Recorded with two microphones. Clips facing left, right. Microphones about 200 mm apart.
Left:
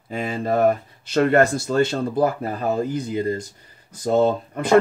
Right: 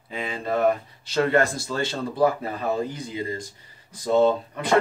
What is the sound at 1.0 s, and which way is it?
Speech, 55° left (ahead or behind).